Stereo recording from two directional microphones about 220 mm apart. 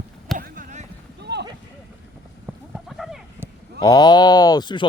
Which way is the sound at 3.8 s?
15° left (ahead or behind).